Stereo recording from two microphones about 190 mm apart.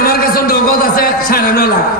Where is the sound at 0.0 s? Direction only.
50° left (ahead or behind).